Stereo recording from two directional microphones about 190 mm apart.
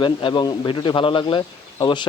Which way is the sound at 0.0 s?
25° left (ahead or behind).